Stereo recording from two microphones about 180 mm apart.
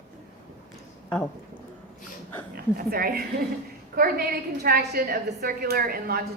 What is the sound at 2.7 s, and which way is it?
A woman's voice, 55° right (ahead or behind).